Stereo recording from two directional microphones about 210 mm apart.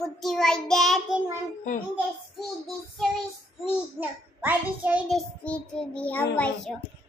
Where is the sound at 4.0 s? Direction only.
10° right (ahead or behind).